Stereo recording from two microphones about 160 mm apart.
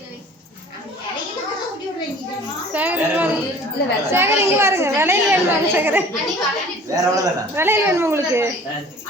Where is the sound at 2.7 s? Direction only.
10° right (ahead or behind).